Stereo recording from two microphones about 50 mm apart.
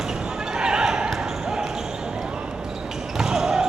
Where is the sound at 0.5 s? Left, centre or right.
Centre.